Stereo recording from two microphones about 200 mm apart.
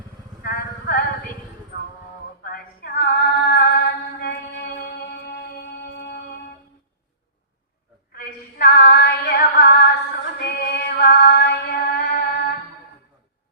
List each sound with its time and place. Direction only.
0.4 s a sound: 50° left (ahead or behind)
2.4 s female singing: 45° left (ahead or behind)
8.1 s female singing: 50° left (ahead or behind)
10.4 s music: 55° left (ahead or behind)